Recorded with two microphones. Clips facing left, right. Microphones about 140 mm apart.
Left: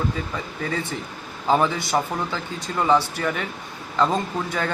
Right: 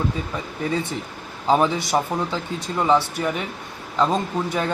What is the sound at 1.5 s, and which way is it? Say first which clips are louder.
Speech: right 1 dB; 20° right (ahead or behind).